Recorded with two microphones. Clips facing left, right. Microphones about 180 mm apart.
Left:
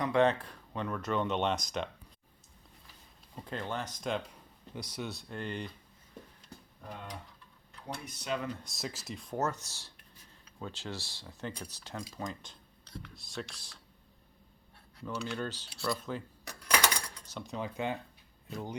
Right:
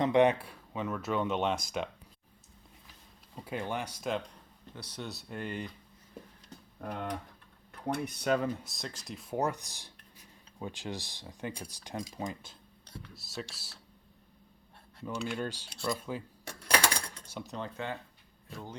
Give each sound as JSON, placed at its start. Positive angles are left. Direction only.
{"t": 0.0, "sound": "speech", "side_deg": -20}
{"t": 3.3, "sound": "speech", "side_deg": -10}
{"t": 4.7, "sound": "speech", "side_deg": 10}
{"t": 6.8, "sound": "speech", "side_deg": -65}
{"t": 8.6, "sound": "speech", "side_deg": 0}
{"t": 15.0, "sound": "speech", "side_deg": -10}
{"t": 16.4, "sound": "dishes", "side_deg": -30}
{"t": 17.2, "sound": "speech", "side_deg": -5}